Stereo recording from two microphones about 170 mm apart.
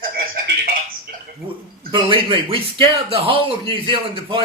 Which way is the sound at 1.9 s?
30° right (ahead or behind).